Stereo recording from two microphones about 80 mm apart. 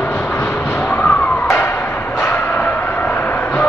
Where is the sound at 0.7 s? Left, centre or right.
Centre.